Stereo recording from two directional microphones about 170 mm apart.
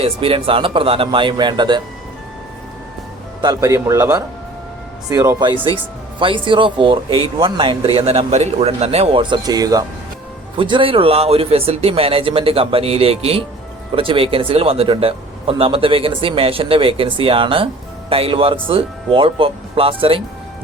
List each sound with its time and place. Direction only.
0.0 s speech: 35° right (ahead or behind)
3.4 s speech: 20° right (ahead or behind)